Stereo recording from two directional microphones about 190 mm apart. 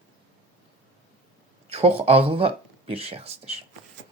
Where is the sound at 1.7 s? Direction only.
35° right (ahead or behind).